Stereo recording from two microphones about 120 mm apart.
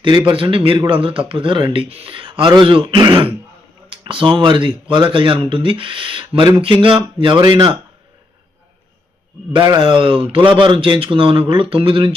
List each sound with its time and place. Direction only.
0.0 s a man's voice: 40° right (ahead or behind)
9.6 s speech: 35° right (ahead or behind)